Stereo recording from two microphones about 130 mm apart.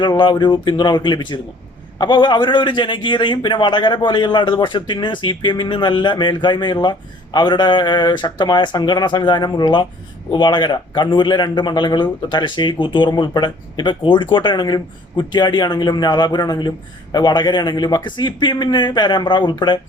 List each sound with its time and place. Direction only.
0.0 s speech: 35° left (ahead or behind)